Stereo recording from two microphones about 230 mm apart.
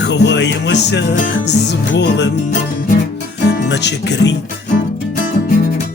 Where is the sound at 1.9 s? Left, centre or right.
Left.